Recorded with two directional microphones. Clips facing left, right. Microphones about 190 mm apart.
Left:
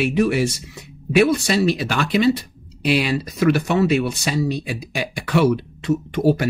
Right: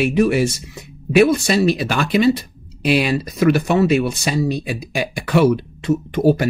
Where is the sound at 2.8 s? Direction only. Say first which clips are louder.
Right 2 dB; 50° right (ahead or behind).